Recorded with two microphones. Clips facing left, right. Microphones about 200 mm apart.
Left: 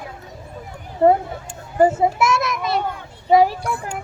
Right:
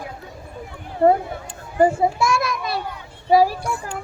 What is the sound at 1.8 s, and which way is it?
Children playing, 20° left (ahead or behind).